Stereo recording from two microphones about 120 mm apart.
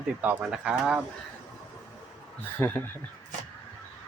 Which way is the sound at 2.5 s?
20° left (ahead or behind).